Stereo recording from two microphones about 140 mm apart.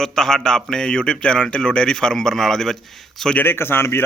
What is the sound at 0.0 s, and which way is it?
A man's voice, 5° left (ahead or behind).